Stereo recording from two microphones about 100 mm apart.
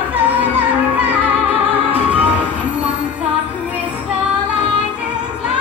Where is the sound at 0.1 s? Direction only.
15° right (ahead or behind).